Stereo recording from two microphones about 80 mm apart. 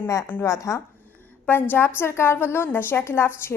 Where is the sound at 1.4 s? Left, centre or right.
Left.